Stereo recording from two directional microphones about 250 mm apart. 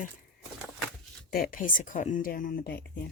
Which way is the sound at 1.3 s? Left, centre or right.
Left.